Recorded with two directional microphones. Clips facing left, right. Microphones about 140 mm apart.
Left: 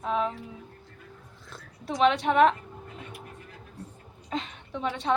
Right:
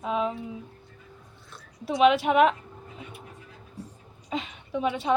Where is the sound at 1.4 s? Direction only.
90° left.